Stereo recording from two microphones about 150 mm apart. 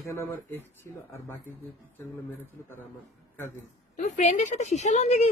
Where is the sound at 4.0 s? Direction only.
55° left (ahead or behind).